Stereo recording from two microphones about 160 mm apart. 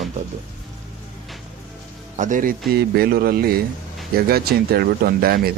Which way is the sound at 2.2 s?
55° right (ahead or behind).